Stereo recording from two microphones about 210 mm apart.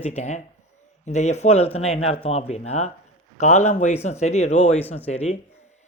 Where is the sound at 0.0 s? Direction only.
30° left (ahead or behind).